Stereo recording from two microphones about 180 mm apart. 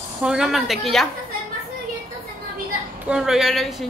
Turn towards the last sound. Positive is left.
turn(degrees=0)  # may be behind; listen again after turning